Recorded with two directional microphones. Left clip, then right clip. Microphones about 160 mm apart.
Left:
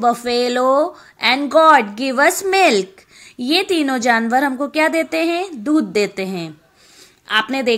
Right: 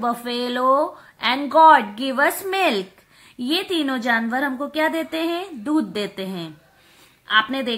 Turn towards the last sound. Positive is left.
turn(degrees=25)  # may be behind; listen again after turning